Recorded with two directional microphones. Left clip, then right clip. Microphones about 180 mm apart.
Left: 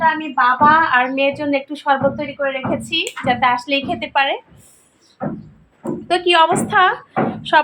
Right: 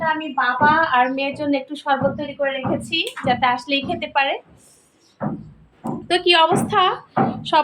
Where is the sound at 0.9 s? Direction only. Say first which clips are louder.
Left 3 dB; 10° left (ahead or behind).